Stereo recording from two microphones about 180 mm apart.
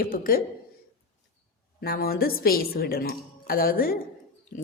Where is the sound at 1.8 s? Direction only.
55° left (ahead or behind).